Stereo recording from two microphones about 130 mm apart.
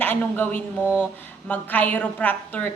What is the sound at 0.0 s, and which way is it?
A woman's voice, 15° left (ahead or behind).